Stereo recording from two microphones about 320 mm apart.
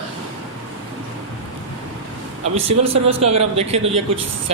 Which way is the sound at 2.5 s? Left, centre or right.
Right.